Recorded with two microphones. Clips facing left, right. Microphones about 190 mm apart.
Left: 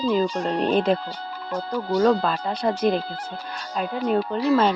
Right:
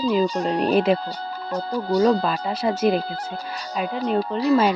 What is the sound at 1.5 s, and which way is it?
Speech, 40° right (ahead or behind).